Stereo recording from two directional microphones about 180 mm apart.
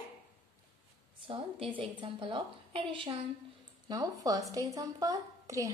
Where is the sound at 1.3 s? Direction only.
30° right (ahead or behind).